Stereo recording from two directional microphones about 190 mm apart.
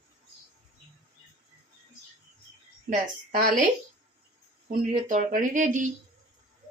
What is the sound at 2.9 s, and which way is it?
Speech, 45° right (ahead or behind).